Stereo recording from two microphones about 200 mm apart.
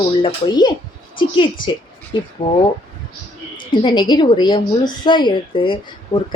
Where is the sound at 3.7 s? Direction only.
25° left (ahead or behind).